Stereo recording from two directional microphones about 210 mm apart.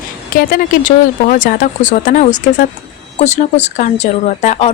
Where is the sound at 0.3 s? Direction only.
45° left (ahead or behind).